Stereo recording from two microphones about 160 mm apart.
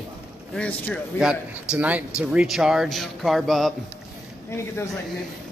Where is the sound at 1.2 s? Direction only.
5° right (ahead or behind).